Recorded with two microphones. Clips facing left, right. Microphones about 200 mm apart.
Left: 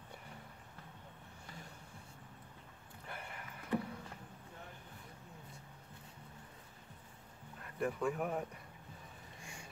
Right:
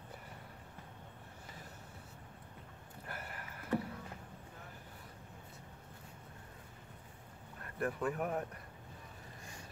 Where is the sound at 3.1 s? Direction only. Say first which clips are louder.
Right 1 dB; 5° right (ahead or behind).